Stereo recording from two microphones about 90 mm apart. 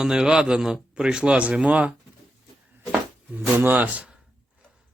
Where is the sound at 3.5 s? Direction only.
20° right (ahead or behind).